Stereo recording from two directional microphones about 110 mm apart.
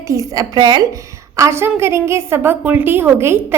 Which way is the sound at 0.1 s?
30° right (ahead or behind).